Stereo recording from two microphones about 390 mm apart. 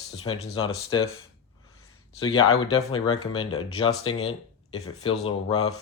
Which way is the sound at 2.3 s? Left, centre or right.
Centre.